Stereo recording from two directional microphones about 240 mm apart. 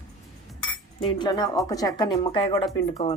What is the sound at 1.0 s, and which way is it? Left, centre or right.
Speech, centre.